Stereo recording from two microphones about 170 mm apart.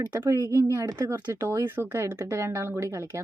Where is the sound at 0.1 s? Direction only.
15° right (ahead or behind).